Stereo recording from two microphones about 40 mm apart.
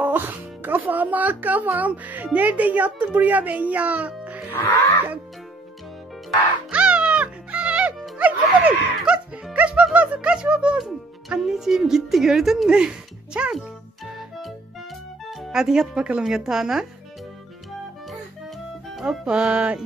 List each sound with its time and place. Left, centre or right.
0.0 s speech: right
4.5 s music: left
6.7 s music: right
8.2 s music: right
9.0 s music: right
9.9 s speech: right
11.3 s a woman's voice: centre
12.6 s speech: right
15.5 s a woman's voice: centre
19.0 s music: right